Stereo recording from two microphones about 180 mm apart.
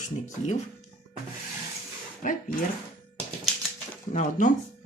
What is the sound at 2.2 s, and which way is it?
Speech, 50° left (ahead or behind).